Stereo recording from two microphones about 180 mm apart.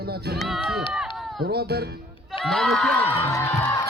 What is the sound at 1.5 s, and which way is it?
Speech, 60° right (ahead or behind).